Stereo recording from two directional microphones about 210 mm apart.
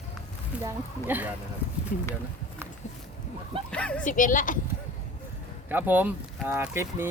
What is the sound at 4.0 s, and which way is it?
Speech, 40° left (ahead or behind).